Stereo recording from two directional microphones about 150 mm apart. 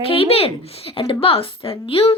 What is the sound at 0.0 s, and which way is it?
Speech, 40° left (ahead or behind).